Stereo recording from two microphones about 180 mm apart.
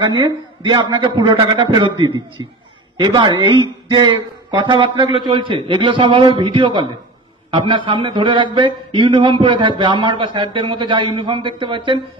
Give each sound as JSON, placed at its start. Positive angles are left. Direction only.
{"t": 0.0, "sound": "speech", "side_deg": -25}